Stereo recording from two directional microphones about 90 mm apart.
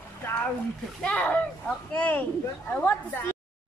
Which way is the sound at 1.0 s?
15° left (ahead or behind).